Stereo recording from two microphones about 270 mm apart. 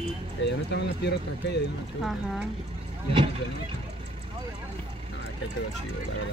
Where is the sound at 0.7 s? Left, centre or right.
Left.